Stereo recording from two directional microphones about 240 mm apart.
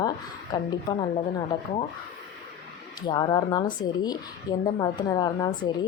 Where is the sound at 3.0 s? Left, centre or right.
Centre.